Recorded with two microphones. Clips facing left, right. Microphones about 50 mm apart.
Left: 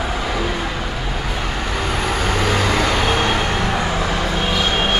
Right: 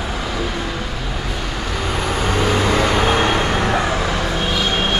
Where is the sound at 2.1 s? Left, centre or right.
Centre.